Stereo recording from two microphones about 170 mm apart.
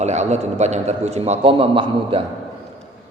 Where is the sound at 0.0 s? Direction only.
40° right (ahead or behind).